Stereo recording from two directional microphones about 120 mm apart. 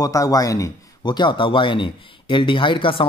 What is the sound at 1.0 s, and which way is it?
A man's voice, 40° left (ahead or behind).